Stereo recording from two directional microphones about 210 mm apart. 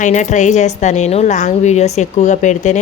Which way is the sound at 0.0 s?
35° left (ahead or behind).